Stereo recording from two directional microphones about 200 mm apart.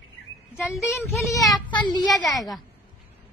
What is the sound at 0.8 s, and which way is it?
A woman's voice, 15° left (ahead or behind).